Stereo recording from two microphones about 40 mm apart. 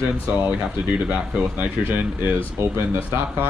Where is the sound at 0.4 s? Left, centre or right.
Right.